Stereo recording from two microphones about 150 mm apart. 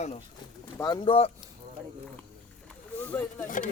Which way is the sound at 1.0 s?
40° left (ahead or behind).